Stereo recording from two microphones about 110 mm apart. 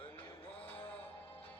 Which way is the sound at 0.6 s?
15° left (ahead or behind).